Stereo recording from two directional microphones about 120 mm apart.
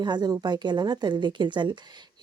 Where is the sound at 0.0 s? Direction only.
35° right (ahead or behind).